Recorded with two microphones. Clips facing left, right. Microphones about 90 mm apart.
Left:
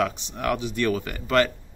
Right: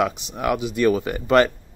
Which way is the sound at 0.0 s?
15° right (ahead or behind).